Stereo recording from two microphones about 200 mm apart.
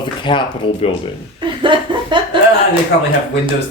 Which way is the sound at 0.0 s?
25° left (ahead or behind).